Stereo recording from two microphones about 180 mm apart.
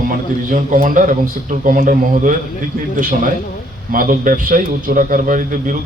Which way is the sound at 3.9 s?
50° right (ahead or behind).